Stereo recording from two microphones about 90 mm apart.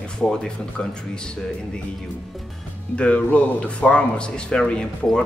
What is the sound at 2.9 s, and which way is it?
Speech, 15° left (ahead or behind).